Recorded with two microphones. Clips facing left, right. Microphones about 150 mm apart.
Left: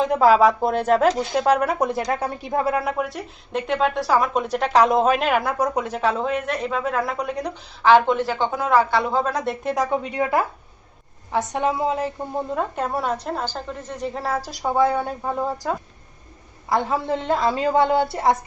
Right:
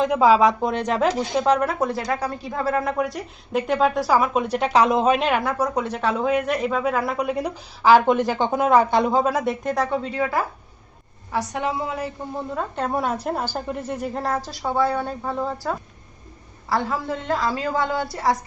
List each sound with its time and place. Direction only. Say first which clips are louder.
0.0 s a woman's voice: left 1 dB; 5° left (ahead or behind)
9.7 s a woman's voice: left 1 dB; 10° left (ahead or behind)
12.5 s a woman's voice: right 2 dB; 5° left (ahead or behind); by 18.3 s 20° left (ahead or behind)